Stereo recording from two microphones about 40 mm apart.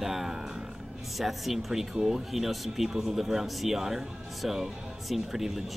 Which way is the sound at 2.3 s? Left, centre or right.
Centre.